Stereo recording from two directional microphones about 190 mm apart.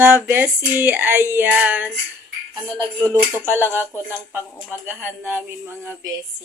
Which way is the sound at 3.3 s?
10° right (ahead or behind).